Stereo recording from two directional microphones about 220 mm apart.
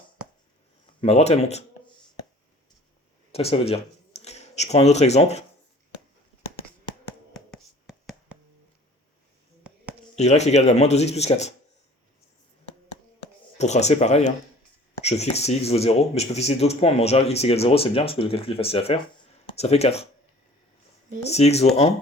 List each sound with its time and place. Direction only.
1.0 s speech: 30° left (ahead or behind)
3.3 s speech: 25° left (ahead or behind)
7.3 s a sound: centre (ahead or behind)
10.2 s speech: 30° left (ahead or behind)
13.6 s speech: 30° left (ahead or behind)
21.2 s speech: 30° left (ahead or behind)